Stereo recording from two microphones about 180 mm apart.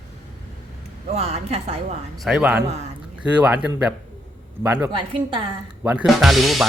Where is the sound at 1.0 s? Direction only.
35° right (ahead or behind).